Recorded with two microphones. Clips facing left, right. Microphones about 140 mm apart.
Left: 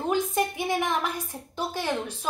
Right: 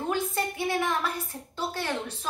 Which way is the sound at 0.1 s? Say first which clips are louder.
Left 5 dB; 15° left (ahead or behind).